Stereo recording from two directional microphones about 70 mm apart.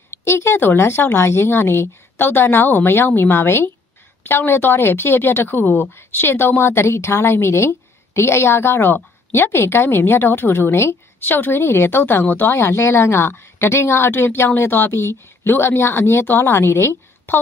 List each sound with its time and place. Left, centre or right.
0.1 s a woman's voice: left